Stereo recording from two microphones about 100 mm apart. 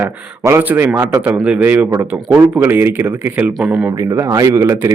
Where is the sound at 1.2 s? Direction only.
15° right (ahead or behind).